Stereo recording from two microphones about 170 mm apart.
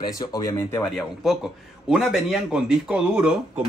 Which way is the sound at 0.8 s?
Centre (ahead or behind).